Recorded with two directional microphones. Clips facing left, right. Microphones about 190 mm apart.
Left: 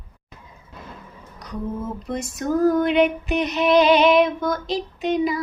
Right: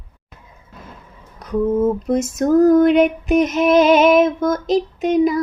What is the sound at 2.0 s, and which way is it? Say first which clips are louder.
Female singing: right 8 dB; 45° right (ahead or behind).